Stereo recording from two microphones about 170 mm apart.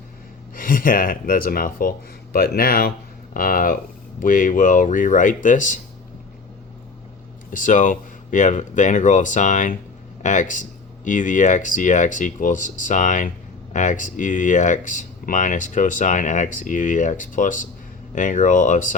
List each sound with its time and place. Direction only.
0.5 s speech: 55° left (ahead or behind)
7.5 s speech: 50° left (ahead or behind)